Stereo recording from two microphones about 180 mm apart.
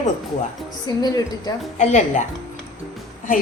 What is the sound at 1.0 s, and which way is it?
Speech, 20° left (ahead or behind).